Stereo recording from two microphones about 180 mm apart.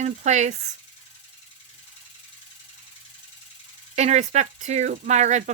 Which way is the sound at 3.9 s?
40° right (ahead or behind).